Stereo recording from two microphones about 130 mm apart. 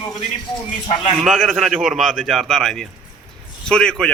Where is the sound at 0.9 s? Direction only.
45° left (ahead or behind).